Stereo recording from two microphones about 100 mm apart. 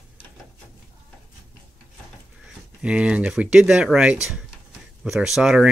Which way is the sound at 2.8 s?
10° right (ahead or behind).